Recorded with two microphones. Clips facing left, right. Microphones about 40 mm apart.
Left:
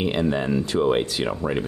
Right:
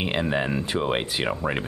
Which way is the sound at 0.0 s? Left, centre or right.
Right.